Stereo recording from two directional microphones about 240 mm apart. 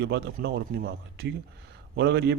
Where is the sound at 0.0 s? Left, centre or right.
Right.